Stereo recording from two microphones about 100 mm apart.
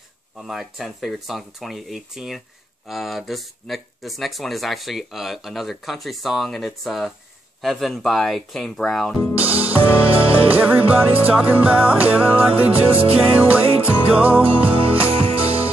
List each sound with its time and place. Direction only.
0.4 s speech: centre (ahead or behind)
9.4 s music: 15° right (ahead or behind)
14.7 s music: 70° right (ahead or behind)